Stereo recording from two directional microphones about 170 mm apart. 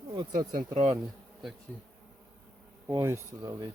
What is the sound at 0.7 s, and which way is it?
Bee, 35° right (ahead or behind).